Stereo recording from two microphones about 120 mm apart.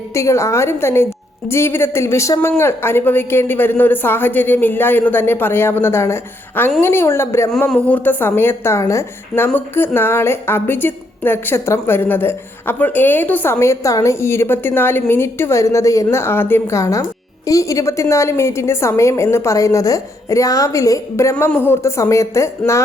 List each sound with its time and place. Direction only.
0.1 s a woman's voice: 25° left (ahead or behind)
7.7 s a woman's voice: 10° left (ahead or behind)